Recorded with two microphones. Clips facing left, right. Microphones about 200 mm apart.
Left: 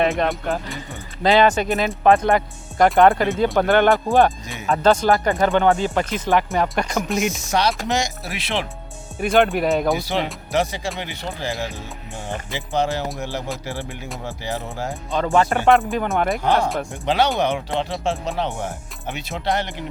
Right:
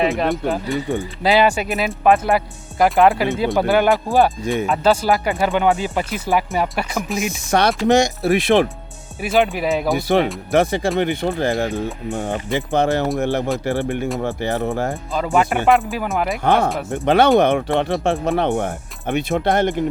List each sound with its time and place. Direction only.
0.0 s speech: centre (ahead or behind)
7.5 s speech: 55° right (ahead or behind)
9.2 s speech: centre (ahead or behind)
10.5 s speech: 55° right (ahead or behind)
15.1 s speech: 5° right (ahead or behind)
16.4 s speech: 55° right (ahead or behind)